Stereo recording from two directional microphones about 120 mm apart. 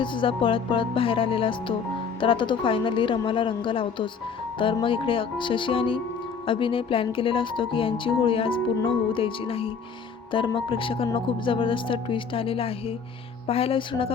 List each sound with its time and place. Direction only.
0.0 s speech: 45° left (ahead or behind)